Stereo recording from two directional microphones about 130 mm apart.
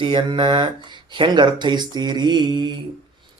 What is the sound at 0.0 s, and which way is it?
A man's voice, 40° right (ahead or behind).